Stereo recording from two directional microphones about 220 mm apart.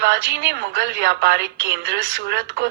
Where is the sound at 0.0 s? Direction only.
55° right (ahead or behind).